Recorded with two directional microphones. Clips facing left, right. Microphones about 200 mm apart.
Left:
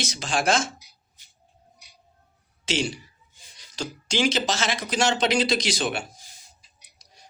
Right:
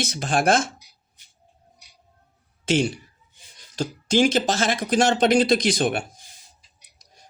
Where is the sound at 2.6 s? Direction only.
55° right (ahead or behind).